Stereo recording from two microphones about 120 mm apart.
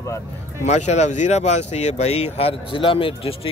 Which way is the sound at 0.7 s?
70° left (ahead or behind).